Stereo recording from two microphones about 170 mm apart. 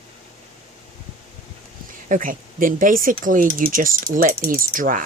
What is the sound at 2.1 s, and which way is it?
Speech, 50° right (ahead or behind).